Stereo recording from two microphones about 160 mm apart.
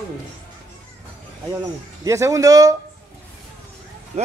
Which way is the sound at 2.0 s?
20° right (ahead or behind).